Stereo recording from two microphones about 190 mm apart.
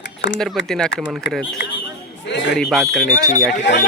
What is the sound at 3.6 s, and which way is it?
Speech, 70° left (ahead or behind).